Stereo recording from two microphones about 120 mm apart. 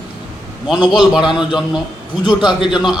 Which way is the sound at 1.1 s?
5° right (ahead or behind).